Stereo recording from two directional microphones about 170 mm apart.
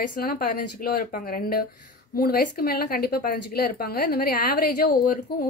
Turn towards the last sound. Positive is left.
turn(degrees=60)  # may be behind; listen again after turning